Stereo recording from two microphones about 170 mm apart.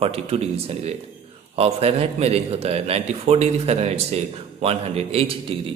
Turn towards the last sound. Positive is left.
turn(degrees=-30)  # may be behind; listen again after turning